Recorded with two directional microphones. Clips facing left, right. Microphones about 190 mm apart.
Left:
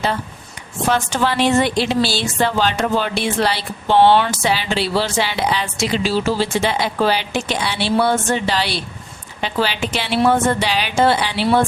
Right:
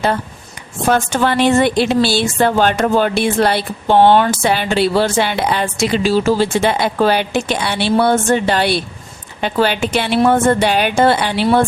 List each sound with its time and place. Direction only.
0.9 s a woman's voice: 50° right (ahead or behind)